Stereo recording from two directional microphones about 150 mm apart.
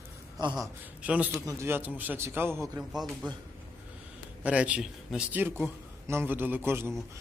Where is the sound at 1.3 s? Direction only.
20° right (ahead or behind).